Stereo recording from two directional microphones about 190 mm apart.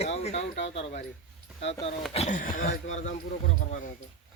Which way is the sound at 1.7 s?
35° left (ahead or behind).